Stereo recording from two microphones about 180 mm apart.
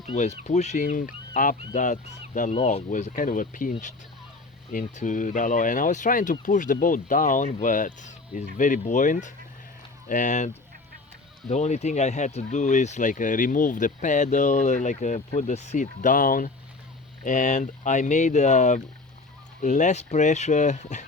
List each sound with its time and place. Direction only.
0.1 s speech: 40° left (ahead or behind)